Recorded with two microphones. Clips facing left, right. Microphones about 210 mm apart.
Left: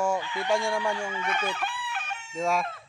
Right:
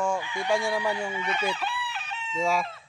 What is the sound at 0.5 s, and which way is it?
Fowl, 5° right (ahead or behind).